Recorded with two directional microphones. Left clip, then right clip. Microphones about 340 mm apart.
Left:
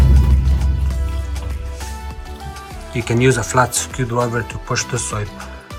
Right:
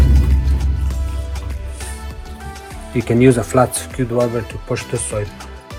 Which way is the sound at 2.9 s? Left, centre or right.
Centre.